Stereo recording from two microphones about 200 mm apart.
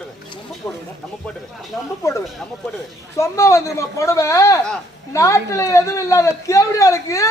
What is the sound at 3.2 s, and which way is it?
Speech, 15° left (ahead or behind).